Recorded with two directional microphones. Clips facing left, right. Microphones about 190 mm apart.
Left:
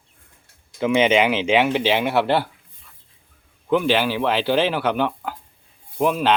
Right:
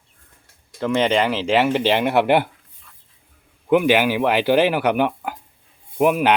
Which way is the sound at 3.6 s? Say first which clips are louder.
Right 3 dB; 15° right (ahead or behind).